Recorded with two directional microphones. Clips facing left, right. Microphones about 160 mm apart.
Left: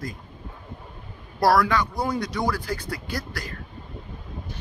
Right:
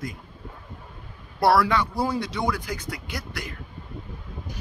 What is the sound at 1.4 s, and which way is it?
Speech, 25° right (ahead or behind).